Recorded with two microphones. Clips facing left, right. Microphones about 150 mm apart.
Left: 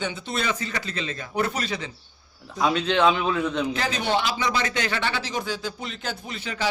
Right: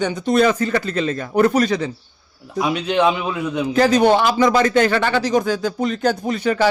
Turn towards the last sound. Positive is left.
turn(degrees=-50)  # may be behind; listen again after turning